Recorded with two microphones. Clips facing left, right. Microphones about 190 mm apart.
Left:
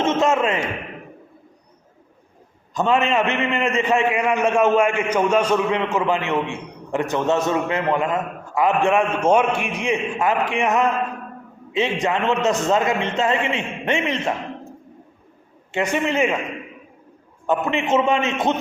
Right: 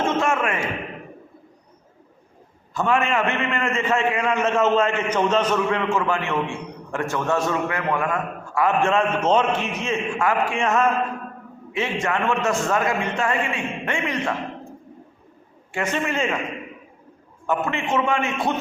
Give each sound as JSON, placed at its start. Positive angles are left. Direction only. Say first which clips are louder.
{"t": 0.0, "sound": "a man's voice", "louder": "left 3 dB", "side_deg": 20}
{"t": 2.7, "sound": "a man's voice", "louder": "left 2 dB", "side_deg": 20}
{"t": 15.7, "sound": "a man's voice", "louder": "left 3 dB", "side_deg": 20}
{"t": 17.4, "sound": "a man's voice", "louder": "left 3 dB", "side_deg": 20}